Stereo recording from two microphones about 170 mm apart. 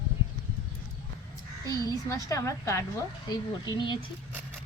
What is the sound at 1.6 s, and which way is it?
A woman's voice, 20° left (ahead or behind).